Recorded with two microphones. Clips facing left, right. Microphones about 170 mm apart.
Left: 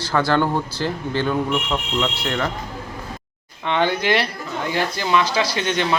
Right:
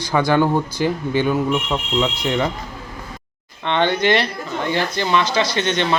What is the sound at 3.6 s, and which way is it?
Speech, 5° left (ahead or behind).